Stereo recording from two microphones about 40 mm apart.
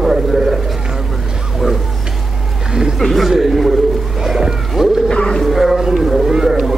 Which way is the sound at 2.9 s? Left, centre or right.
Centre.